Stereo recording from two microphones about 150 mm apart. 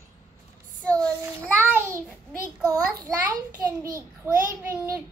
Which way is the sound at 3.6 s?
20° right (ahead or behind).